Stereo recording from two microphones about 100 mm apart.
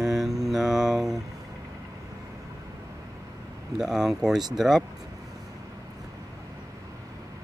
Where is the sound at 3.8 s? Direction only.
5° right (ahead or behind).